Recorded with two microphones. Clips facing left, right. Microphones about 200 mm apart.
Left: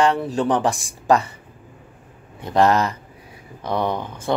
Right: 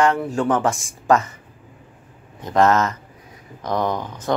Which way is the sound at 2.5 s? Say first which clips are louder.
Even; 15° left (ahead or behind).